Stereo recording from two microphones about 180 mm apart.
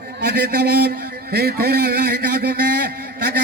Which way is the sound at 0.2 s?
65° right (ahead or behind).